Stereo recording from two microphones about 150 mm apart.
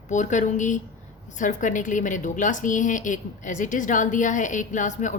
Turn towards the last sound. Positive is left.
turn(degrees=55)  # may be behind; listen again after turning